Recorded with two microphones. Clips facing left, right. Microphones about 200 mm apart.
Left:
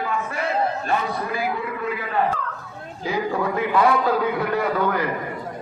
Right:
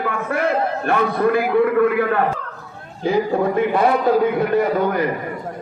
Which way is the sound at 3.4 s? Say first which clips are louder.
Right 3 dB; 45° right (ahead or behind).